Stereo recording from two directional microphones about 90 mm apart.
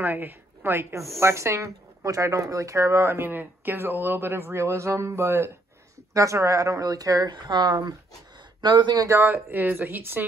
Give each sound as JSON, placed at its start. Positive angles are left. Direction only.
{"t": 0.0, "sound": "a woman's voice", "side_deg": -20}
{"t": 7.2, "sound": "speech", "side_deg": -55}
{"t": 9.0, "sound": "speech", "side_deg": -30}